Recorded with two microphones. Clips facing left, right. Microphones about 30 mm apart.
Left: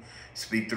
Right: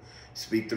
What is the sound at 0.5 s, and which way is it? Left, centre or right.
Speech, left.